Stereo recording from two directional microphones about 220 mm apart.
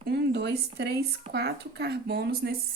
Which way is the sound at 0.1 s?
50° right (ahead or behind).